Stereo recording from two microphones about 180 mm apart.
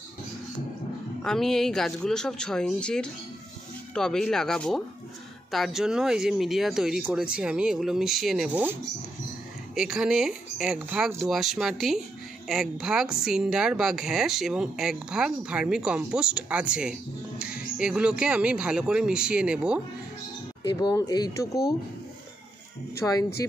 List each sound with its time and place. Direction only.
1.2 s a woman's voice: 5° left (ahead or behind)
9.8 s a woman's voice: 5° right (ahead or behind)
20.6 s speech: 20° left (ahead or behind)
22.9 s speech: 20° left (ahead or behind)